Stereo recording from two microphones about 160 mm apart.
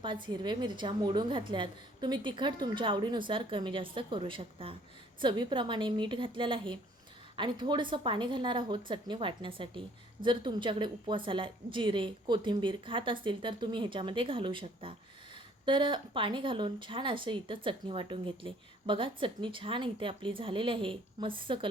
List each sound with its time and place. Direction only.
0.0 s a woman's voice: 30° right (ahead or behind)